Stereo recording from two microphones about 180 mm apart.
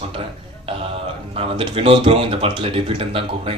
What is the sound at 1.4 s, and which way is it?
Speech, 30° right (ahead or behind).